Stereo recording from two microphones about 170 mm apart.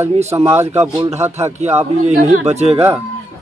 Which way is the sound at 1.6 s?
40° right (ahead or behind).